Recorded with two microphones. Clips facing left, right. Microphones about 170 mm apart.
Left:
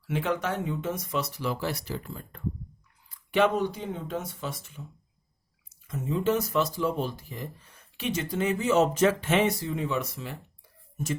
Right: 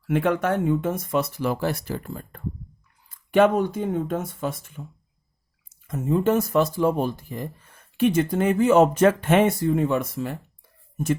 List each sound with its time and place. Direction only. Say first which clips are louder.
0.0 s speech: right 7 dB; 55° right (ahead or behind)